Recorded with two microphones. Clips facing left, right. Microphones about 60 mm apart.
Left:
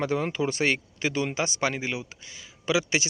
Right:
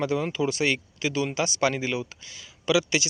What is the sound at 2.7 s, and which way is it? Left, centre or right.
Speech, left.